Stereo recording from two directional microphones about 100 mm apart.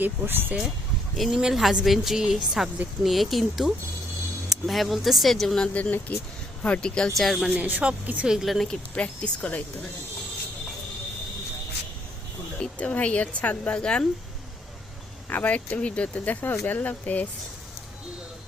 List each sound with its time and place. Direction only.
0.0 s speech: 20° right (ahead or behind)
1.1 s speech: centre (ahead or behind)
7.5 s speech: 15° right (ahead or behind); by 9.6 s 15° left (ahead or behind)
12.6 s speech: 15° left (ahead or behind)
15.3 s speech: 15° left (ahead or behind)